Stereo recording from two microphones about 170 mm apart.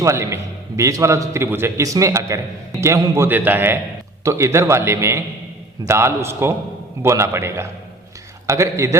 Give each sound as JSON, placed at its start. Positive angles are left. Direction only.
{"t": 0.0, "sound": "a man's voice", "side_deg": -15}